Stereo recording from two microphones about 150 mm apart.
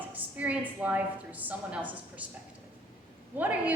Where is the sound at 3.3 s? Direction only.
10° right (ahead or behind).